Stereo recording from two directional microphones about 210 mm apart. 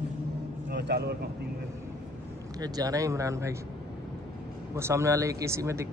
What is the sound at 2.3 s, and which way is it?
A man's voice, 15° right (ahead or behind).